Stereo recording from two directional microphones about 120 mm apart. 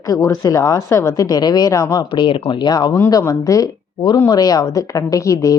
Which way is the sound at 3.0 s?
25° left (ahead or behind).